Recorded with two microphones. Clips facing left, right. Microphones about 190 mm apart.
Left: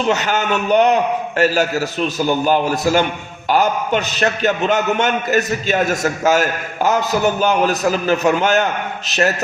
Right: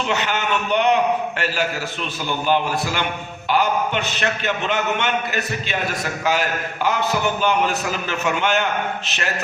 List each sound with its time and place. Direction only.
0.1 s a man's voice: 40° left (ahead or behind)
7.4 s a man's voice: 40° left (ahead or behind)